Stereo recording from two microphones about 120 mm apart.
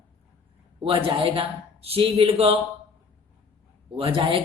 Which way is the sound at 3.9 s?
50° right (ahead or behind).